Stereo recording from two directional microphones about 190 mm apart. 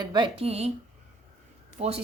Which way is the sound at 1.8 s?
35° right (ahead or behind).